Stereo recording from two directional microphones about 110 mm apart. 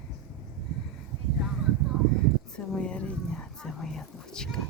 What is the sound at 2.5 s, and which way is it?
Whispering, 10° left (ahead or behind).